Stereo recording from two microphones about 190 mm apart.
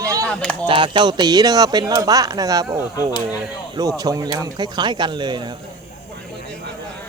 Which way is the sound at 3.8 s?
20° right (ahead or behind).